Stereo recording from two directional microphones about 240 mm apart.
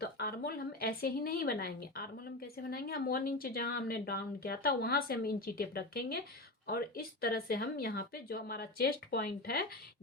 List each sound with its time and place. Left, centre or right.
0.0 s speech: left